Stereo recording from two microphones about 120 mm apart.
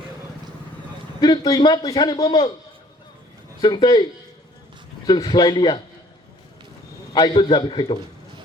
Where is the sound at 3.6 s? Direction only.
40° left (ahead or behind).